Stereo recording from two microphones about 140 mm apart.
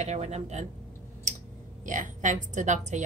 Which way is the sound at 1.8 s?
65° right (ahead or behind).